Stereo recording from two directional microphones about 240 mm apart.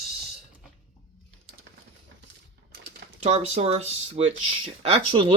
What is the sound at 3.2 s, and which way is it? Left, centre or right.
Speech, right.